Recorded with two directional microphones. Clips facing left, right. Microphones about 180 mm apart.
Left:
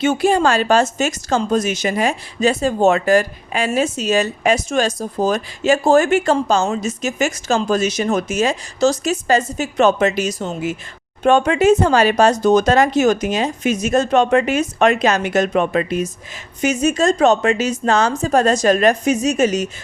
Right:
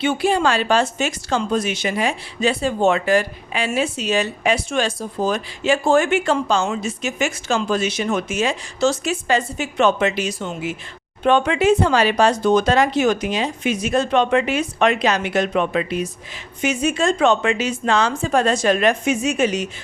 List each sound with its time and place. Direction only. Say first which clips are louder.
0.0 s a woman's voice: left 3 dB; 45° left (ahead or behind)